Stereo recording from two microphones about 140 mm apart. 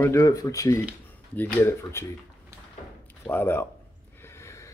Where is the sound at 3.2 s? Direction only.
15° left (ahead or behind).